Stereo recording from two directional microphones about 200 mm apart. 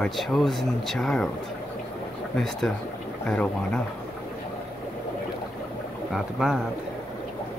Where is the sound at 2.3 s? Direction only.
Centre (ahead or behind).